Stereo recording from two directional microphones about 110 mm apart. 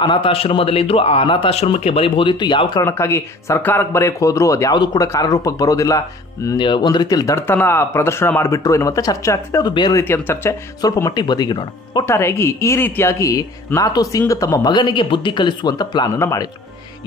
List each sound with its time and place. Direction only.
0.0 s a man's voice: 50° left (ahead or behind)
2.8 s speech: 25° left (ahead or behind)
4.7 s speech: 45° left (ahead or behind)
5.0 s speech: 30° left (ahead or behind)
6.6 s speech: 45° left (ahead or behind)
7.3 s speech: 20° left (ahead or behind)
9.7 s speech: 40° left (ahead or behind)
9.9 s speech: 20° left (ahead or behind)
11.1 s speech: 40° left (ahead or behind)
12.1 s speech: 25° left (ahead or behind); by 16.1 s 40° left (ahead or behind)
16.2 s speech: 30° left (ahead or behind)